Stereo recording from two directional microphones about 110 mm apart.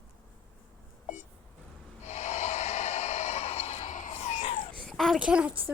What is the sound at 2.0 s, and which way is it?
Snort, 90° left.